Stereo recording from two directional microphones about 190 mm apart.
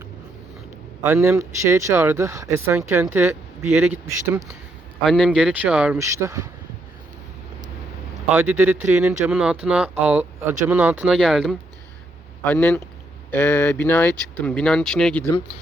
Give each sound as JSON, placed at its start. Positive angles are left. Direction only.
{"t": 1.0, "sound": "speech", "side_deg": -10}
{"t": 6.0, "sound": "speech", "side_deg": -15}
{"t": 8.3, "sound": "speech", "side_deg": -10}